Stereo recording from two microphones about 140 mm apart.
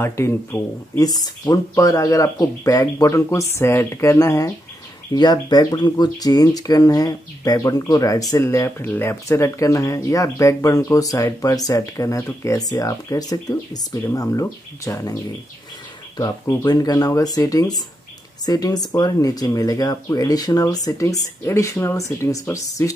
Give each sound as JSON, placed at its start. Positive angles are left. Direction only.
{"t": 0.0, "sound": "speech", "side_deg": 20}
{"t": 16.2, "sound": "speech", "side_deg": 25}